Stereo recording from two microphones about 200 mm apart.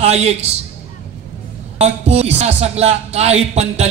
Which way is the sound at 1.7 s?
30° right (ahead or behind).